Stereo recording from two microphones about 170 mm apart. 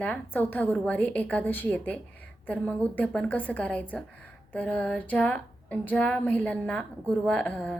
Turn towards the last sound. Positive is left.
turn(degrees=5)  # may be behind; listen again after turning